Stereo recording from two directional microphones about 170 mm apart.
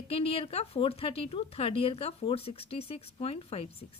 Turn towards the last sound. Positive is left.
turn(degrees=35)  # may be behind; listen again after turning